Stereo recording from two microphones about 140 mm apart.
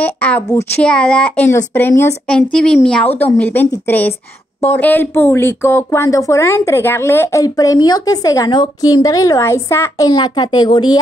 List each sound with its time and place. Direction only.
0.0 s a child's voice: 10° left (ahead or behind); by 11.0 s 30° left (ahead or behind)